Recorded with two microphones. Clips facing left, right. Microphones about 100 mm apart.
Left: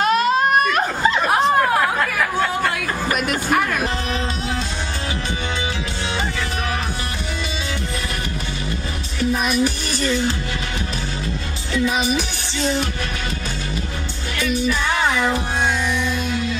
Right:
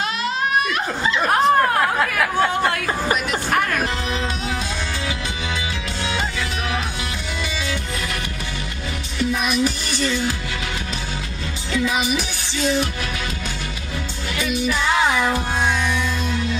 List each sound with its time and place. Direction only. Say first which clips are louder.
0.0 s laughter: left 7 dB; 45° left (ahead or behind)
1.2 s chatter: right 3 dB; centre (ahead or behind)